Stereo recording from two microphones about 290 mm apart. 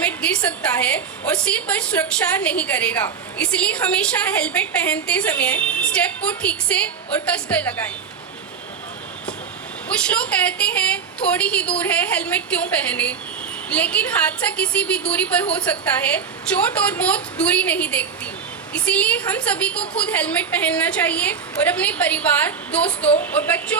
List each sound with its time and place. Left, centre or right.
0.0 s a woman's voice: centre
9.9 s a woman's voice: centre